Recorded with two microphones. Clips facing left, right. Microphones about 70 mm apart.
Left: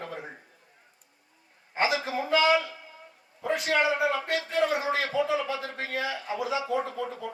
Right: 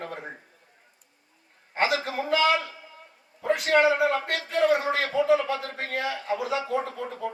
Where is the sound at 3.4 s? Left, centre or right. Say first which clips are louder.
Right 4 dB; right.